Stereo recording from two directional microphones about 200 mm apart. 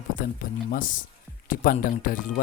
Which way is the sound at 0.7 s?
40° left (ahead or behind).